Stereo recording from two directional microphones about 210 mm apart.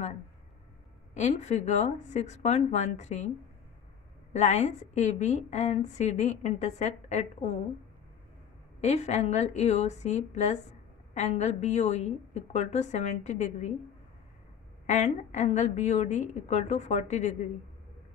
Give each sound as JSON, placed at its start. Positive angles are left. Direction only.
{"t": 1.1, "sound": "a woman's voice", "side_deg": 35}
{"t": 4.3, "sound": "a woman's voice", "side_deg": 35}
{"t": 8.8, "sound": "a woman's voice", "side_deg": 30}
{"t": 14.9, "sound": "a woman's voice", "side_deg": 35}